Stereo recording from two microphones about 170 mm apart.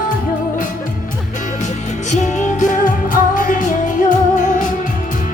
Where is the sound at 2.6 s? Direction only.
50° left (ahead or behind).